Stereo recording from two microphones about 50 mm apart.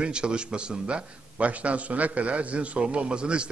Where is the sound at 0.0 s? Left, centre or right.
Centre.